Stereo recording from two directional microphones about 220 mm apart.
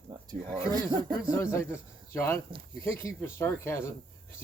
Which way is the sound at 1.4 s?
10° left (ahead or behind).